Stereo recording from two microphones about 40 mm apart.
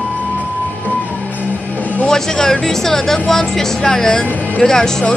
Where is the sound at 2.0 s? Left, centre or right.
Centre.